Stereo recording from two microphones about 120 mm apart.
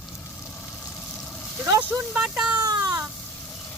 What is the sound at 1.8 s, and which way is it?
Speech, 15° right (ahead or behind).